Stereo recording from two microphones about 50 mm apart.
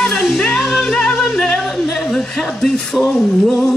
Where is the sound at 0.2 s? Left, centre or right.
Centre.